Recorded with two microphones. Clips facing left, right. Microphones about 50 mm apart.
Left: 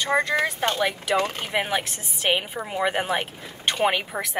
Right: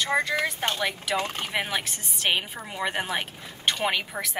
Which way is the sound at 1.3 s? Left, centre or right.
Centre.